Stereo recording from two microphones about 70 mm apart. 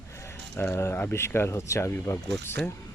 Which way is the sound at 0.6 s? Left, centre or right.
Left.